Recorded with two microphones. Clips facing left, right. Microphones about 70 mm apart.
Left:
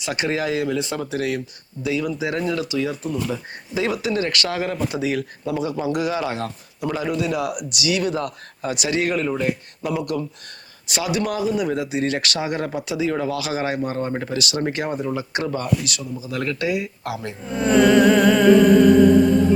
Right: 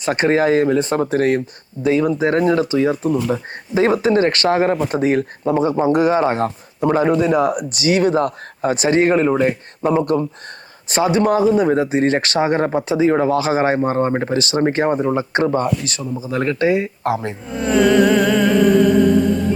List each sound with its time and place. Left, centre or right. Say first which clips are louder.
0.0 s speech: right 8 dB; right
17.5 s music: even; centre